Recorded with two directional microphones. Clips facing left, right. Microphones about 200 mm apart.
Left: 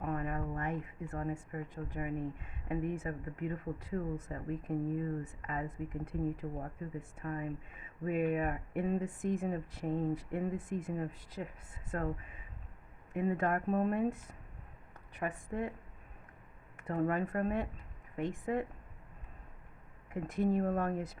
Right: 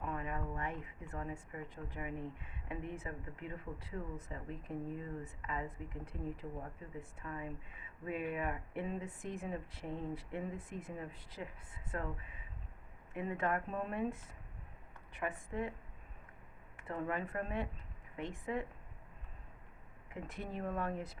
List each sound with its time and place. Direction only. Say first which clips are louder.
0.0 s speech: left 4 dB; 45° left (ahead or behind)
13.1 s speech: left 5 dB; 45° left (ahead or behind)
16.7 s speech: left 6 dB; 45° left (ahead or behind)
20.2 s speech: left 11 dB; 45° left (ahead or behind)